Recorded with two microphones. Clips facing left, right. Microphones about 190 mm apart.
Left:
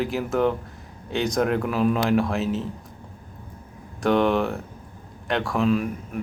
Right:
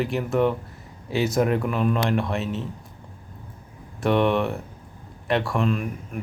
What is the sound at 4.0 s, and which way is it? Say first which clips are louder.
Speech: left 1 dB; centre (ahead or behind).